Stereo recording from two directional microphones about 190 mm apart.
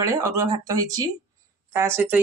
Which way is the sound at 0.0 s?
15° right (ahead or behind).